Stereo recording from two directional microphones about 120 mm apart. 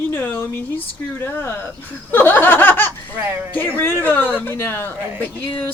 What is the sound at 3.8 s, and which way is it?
A woman's voice, 15° left (ahead or behind).